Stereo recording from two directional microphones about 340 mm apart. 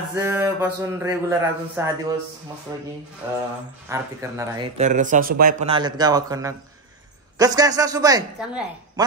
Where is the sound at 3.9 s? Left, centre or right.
Centre.